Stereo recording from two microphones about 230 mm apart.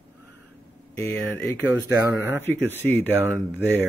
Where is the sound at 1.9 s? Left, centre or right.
Centre.